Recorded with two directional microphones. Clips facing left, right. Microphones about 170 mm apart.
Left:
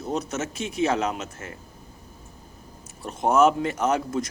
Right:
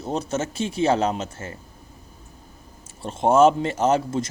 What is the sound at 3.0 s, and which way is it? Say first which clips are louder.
Speech: right 3 dB; 25° right (ahead or behind).